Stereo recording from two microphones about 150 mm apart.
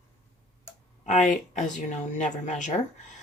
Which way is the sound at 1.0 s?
50° left (ahead or behind).